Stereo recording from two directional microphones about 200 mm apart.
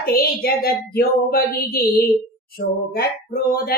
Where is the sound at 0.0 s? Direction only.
50° left (ahead or behind).